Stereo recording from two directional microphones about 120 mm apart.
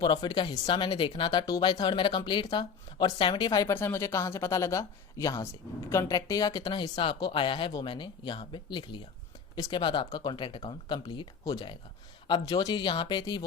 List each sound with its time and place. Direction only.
0.0 s speech: 40° left (ahead or behind)